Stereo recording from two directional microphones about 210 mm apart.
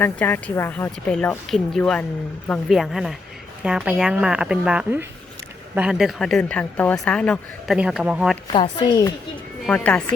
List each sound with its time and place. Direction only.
0.0 s speech: 10° left (ahead or behind)
8.5 s speech: 25° left (ahead or behind)
9.6 s speech: 5° left (ahead or behind)